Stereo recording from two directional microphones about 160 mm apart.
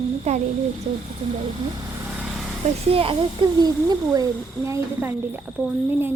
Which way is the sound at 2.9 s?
35° right (ahead or behind).